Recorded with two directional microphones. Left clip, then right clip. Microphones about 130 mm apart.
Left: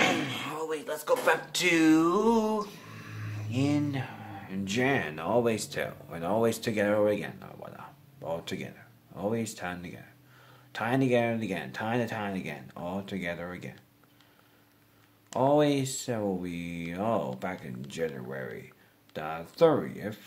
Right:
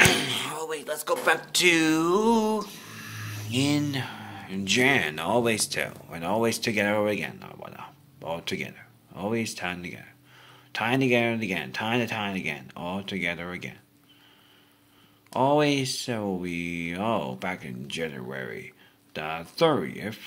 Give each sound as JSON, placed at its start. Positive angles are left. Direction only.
{"t": 0.0, "sound": "speech", "side_deg": -30}
{"t": 2.6, "sound": "a sound", "side_deg": -5}
{"t": 3.8, "sound": "speech", "side_deg": -10}
{"t": 15.3, "sound": "speech", "side_deg": 0}